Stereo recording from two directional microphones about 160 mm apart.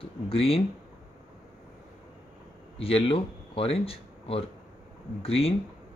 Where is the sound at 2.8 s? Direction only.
35° left (ahead or behind).